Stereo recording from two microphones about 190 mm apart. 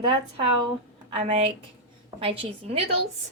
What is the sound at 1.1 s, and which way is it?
A woman's voice, 30° right (ahead or behind).